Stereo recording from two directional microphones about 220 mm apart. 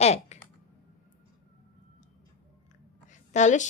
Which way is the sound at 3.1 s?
35° left (ahead or behind).